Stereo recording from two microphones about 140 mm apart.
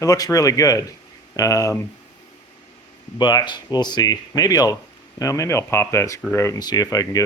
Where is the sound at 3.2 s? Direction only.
30° left (ahead or behind).